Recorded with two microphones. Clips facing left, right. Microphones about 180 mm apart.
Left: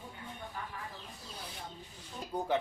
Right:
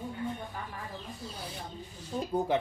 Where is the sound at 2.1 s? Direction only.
40° right (ahead or behind).